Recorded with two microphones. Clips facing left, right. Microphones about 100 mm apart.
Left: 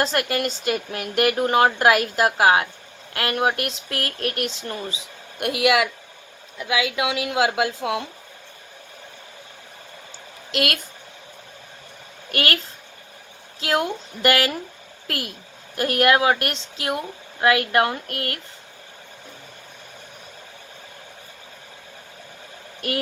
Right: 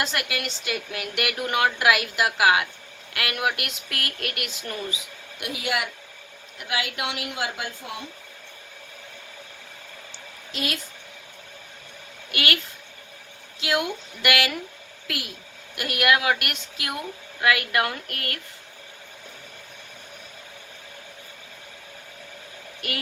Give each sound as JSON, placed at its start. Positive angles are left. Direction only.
{"t": 0.0, "sound": "a woman's voice", "side_deg": 40}
{"t": 5.4, "sound": "a woman's voice", "side_deg": 70}
{"t": 7.3, "sound": "a woman's voice", "side_deg": 90}
{"t": 10.5, "sound": "a woman's voice", "side_deg": 70}
{"t": 12.3, "sound": "a woman's voice", "side_deg": 40}